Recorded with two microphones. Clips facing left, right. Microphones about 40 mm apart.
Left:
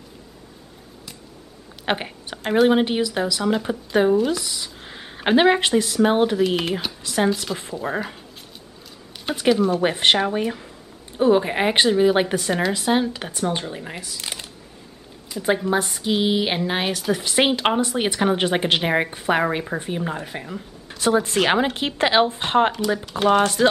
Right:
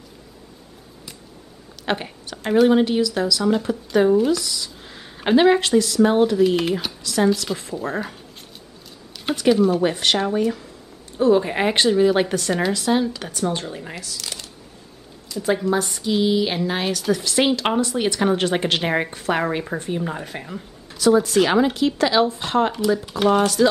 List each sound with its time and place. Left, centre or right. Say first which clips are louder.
1.9 s a woman's voice: even; left
6.3 s speech: right 3 dB; centre
7.0 s a sound: even; left
7.5 s speech: right 1 dB; centre
9.1 s a sound: right 2 dB; left
9.5 s speech: right 2 dB; centre
9.8 s speech: left 1 dB; left; by 13.9 s centre
13.9 s speech: left 1 dB; left
20.2 s speech: even; centre
20.9 s speech: right 3 dB; left